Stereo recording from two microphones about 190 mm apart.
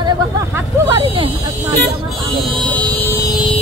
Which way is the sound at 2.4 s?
5° left (ahead or behind).